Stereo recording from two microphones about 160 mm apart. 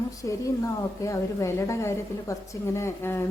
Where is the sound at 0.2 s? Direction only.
20° left (ahead or behind).